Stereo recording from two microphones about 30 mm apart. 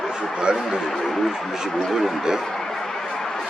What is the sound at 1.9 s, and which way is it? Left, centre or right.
Speech, centre.